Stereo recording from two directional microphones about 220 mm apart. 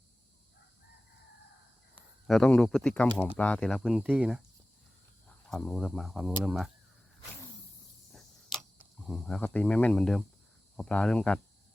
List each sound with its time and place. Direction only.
2.2 s speech: centre (ahead or behind)
5.5 s speech: 5° left (ahead or behind)
8.1 s a sound: centre (ahead or behind)
10.8 s speech: 5° left (ahead or behind)